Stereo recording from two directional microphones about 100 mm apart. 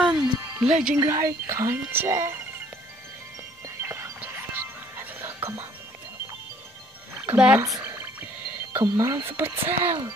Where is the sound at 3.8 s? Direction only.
25° right (ahead or behind).